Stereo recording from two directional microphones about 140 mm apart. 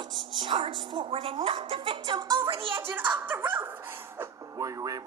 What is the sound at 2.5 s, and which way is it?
Speech, 40° right (ahead or behind).